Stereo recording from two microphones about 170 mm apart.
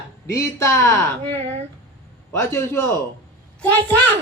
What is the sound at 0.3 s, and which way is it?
A woman's voice, 15° left (ahead or behind).